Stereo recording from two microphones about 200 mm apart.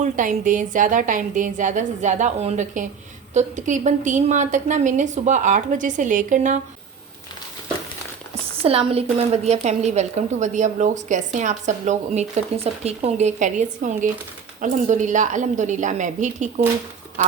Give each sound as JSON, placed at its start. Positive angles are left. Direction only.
{"t": 0.0, "sound": "a woman's voice", "side_deg": -40}
{"t": 8.6, "sound": "a woman's voice", "side_deg": -30}
{"t": 17.2, "sound": "duck", "side_deg": -40}